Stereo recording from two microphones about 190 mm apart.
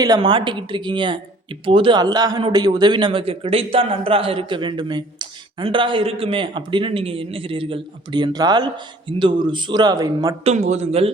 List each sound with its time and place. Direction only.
0.0 s a man's voice: 25° right (ahead or behind)
10.4 s a man's voice: 35° right (ahead or behind)